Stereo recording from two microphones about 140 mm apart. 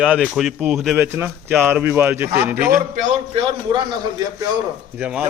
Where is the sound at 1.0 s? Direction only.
15° right (ahead or behind).